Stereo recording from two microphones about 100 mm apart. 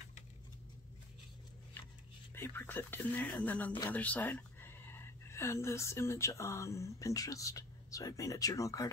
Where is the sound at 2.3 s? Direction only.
25° left (ahead or behind).